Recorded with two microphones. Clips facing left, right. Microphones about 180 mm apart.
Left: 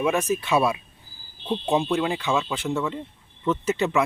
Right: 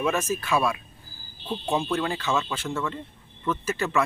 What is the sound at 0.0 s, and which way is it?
Speech, 15° left (ahead or behind).